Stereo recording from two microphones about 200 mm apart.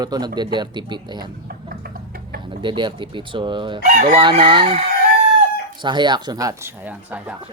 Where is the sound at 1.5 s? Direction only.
50° right (ahead or behind).